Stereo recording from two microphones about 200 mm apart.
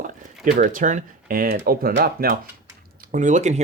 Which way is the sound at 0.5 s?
40° right (ahead or behind).